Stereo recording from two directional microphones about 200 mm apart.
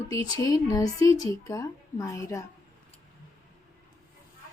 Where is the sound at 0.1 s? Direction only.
20° left (ahead or behind).